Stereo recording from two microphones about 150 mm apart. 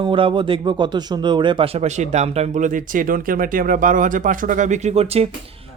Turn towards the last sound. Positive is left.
turn(degrees=-40)  # may be behind; listen again after turning